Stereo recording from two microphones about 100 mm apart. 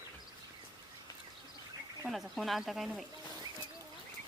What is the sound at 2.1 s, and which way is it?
Speech, centre (ahead or behind).